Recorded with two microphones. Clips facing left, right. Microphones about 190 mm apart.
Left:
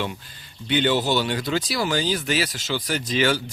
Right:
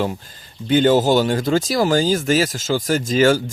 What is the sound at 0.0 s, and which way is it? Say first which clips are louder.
Speech: right 6 dB; 40° right (ahead or behind).